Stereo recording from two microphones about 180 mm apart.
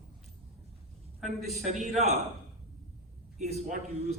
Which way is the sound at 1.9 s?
35° right (ahead or behind).